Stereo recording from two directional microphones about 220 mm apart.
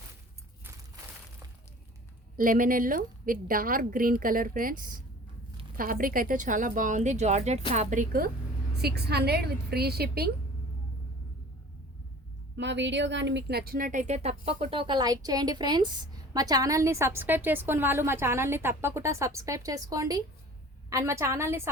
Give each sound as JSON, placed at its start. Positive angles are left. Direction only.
{"t": 2.3, "sound": "a woman's voice", "side_deg": -40}
{"t": 12.5, "sound": "speech", "side_deg": -55}